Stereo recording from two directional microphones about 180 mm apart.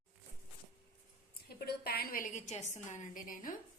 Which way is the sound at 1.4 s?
60° left (ahead or behind).